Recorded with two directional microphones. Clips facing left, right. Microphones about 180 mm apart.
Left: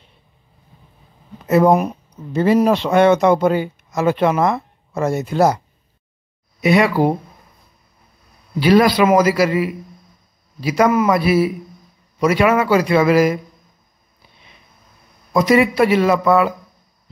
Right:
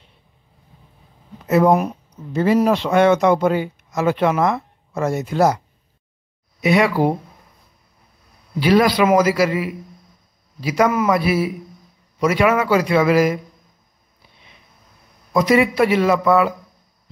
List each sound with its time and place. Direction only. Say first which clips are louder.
1.7 s a sound: left 1 dB; 15° left (ahead or behind)
2.4 s speech: left 2 dB; 30° left (ahead or behind)
6.6 s speech: left 2 dB; 35° left (ahead or behind)
8.5 s speech: left 2 dB; 35° left (ahead or behind)
15.4 s speech: left 2 dB; 40° left (ahead or behind)